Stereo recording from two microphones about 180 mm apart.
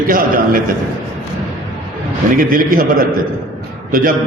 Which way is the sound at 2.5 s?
50° right (ahead or behind).